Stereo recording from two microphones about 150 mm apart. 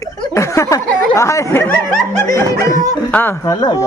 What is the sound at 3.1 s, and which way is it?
Speech, 10° left (ahead or behind).